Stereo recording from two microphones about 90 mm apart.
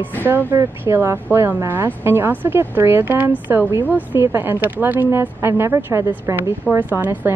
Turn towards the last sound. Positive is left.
turn(degrees=-20)  # may be behind; listen again after turning